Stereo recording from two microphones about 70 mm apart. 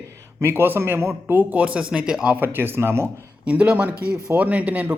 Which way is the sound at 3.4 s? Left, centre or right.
Centre.